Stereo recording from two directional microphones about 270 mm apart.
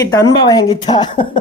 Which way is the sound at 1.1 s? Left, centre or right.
Left.